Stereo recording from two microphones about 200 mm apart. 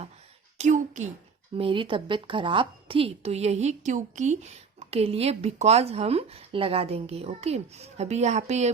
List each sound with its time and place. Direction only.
0.6 s speech: 35° right (ahead or behind)
1.5 s a woman's voice: 25° right (ahead or behind)